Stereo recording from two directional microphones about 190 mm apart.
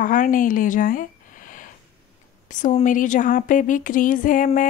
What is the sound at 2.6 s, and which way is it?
Speech, 40° left (ahead or behind).